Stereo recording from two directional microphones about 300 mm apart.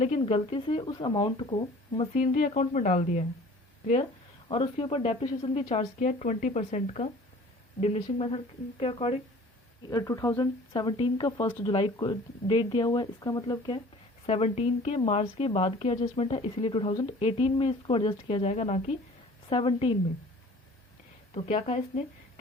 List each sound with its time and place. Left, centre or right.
0.0 s speech: centre
4.4 s speech: centre
21.3 s speech: left